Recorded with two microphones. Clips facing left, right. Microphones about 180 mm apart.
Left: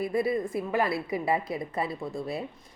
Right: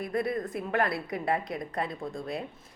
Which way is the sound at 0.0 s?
5° left (ahead or behind).